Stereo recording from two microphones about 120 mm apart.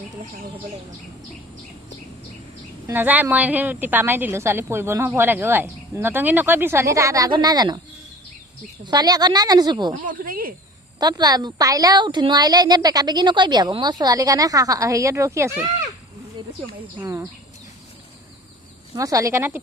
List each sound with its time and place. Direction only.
2.8 s a woman's voice: 15° right (ahead or behind); by 7.8 s 35° right (ahead or behind)
8.8 s a woman's voice: 35° right (ahead or behind)
11.0 s a woman's voice: 35° right (ahead or behind)
17.0 s speech: 25° right (ahead or behind)
18.9 s speech: 30° right (ahead or behind)